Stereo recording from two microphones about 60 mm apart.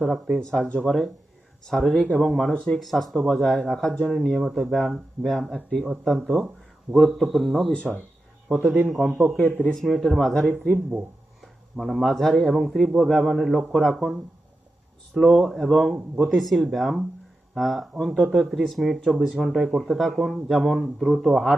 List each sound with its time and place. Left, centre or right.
0.0 s speech: centre
0.5 s speech: centre
0.9 s speech: centre
2.6 s speech: centre
2.8 s speech: centre
4.7 s speech: centre
8.4 s speech: centre
11.8 s speech: centre
19.2 s speech: centre